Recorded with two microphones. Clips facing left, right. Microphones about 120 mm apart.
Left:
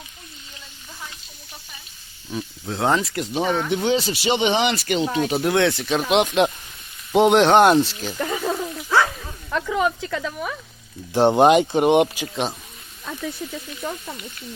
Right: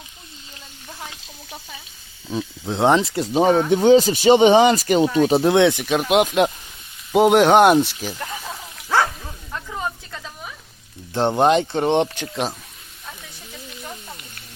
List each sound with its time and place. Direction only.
2.3 s speech: 25° right (ahead or behind)
3.2 s speech: 40° right (ahead or behind)
5.5 s speech: 20° right (ahead or behind)
8.2 s a sound: 90° left; by 10.5 s 75° left (ahead or behind)
11.1 s speech: 15° left (ahead or behind); by 12.5 s centre (ahead or behind)